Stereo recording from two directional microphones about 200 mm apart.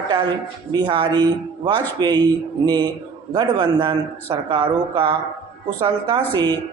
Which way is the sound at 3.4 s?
25° right (ahead or behind).